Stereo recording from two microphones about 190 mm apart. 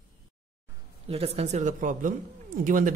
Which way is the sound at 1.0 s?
30° right (ahead or behind).